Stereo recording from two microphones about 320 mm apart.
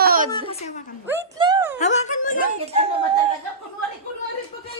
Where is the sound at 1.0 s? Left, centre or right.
Centre.